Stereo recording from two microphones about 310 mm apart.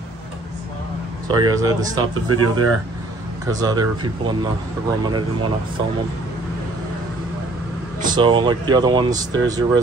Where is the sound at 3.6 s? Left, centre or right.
Centre.